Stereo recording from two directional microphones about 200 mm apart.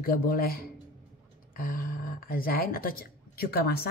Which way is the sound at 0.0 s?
45° left (ahead or behind).